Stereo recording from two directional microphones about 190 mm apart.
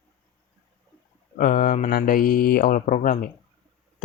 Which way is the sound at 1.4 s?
45° left (ahead or behind).